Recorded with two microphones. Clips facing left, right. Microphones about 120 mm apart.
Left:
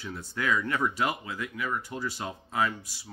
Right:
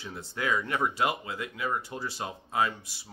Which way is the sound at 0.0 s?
20° right (ahead or behind).